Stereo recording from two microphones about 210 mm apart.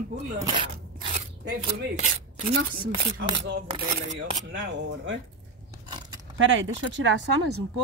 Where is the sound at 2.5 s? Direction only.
90° right.